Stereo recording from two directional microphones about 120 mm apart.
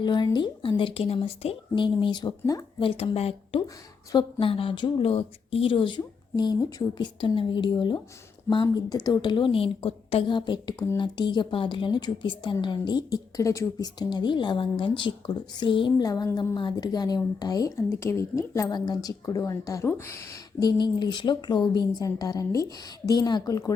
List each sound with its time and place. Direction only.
0.0 s speech: 40° left (ahead or behind); by 1.5 s 55° left (ahead or behind)
1.7 s speech: 40° left (ahead or behind)
2.8 s speech: 55° left (ahead or behind)
4.1 s speech: 40° left (ahead or behind)
7.2 s speech: 45° left (ahead or behind)
16.0 s speech: 30° left (ahead or behind)